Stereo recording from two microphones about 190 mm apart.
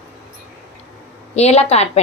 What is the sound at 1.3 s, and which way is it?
Speech, 35° left (ahead or behind).